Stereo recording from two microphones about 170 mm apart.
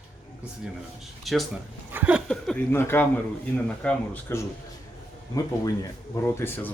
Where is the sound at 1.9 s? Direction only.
10° right (ahead or behind).